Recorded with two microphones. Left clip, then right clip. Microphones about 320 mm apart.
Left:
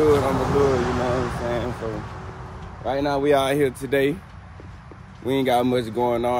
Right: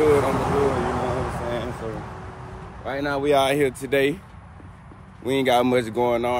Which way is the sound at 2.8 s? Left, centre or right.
Centre.